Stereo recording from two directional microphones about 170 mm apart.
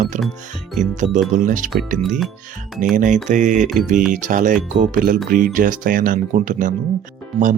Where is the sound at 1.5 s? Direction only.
50° right (ahead or behind).